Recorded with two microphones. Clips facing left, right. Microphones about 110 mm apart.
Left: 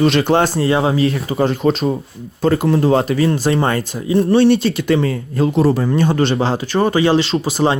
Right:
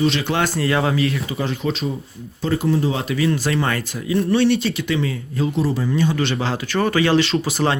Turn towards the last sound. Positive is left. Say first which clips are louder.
# left 3 dB
turn(degrees=25)  # may be behind; listen again after turning